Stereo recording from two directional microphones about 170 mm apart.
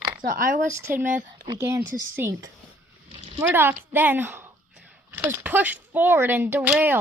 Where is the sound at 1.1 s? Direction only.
50° right (ahead or behind).